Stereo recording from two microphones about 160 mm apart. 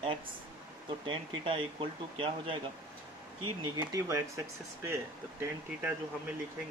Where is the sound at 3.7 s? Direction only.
20° right (ahead or behind).